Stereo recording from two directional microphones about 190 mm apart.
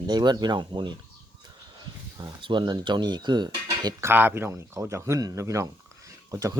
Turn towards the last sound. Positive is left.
turn(degrees=-15)  # may be behind; listen again after turning